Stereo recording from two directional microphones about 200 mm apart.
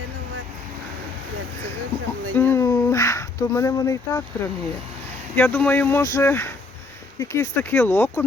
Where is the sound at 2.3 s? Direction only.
10° left (ahead or behind).